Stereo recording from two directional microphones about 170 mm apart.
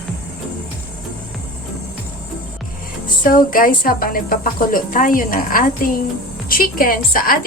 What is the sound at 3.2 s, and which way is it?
A woman's voice, 55° left (ahead or behind).